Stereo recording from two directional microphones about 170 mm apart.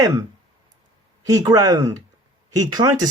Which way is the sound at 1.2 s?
20° right (ahead or behind).